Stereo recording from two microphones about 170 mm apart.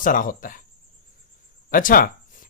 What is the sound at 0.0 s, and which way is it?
Speech, 55° left (ahead or behind).